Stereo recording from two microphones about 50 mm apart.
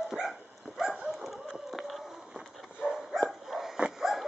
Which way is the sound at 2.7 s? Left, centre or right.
Centre.